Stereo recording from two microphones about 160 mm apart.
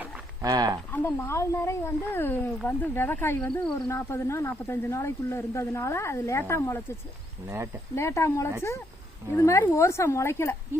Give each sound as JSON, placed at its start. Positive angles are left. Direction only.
{"t": 0.4, "sound": "speech", "side_deg": -25}
{"t": 0.9, "sound": "speech", "side_deg": 15}
{"t": 7.4, "sound": "speech", "side_deg": -15}
{"t": 7.9, "sound": "speech", "side_deg": 15}